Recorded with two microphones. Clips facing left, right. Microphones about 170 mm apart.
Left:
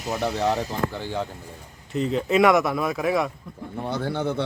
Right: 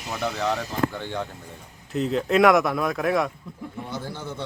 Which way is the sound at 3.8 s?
65° left (ahead or behind).